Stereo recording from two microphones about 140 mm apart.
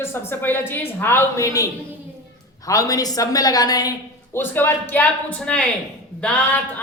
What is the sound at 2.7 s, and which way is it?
A woman's voice, 25° left (ahead or behind).